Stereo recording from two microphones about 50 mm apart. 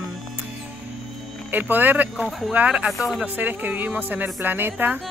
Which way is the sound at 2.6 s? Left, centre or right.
Right.